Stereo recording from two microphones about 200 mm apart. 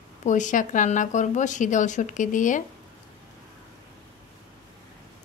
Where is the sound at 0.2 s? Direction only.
40° left (ahead or behind).